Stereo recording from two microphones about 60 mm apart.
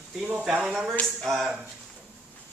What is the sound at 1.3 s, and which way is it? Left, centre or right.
Speech, centre.